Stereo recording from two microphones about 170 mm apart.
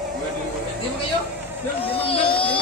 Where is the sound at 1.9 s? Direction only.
35° left (ahead or behind).